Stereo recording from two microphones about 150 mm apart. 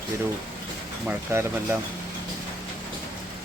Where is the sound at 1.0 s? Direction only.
15° right (ahead or behind).